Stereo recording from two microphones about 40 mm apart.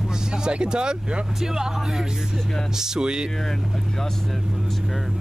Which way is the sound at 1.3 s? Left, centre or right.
Centre.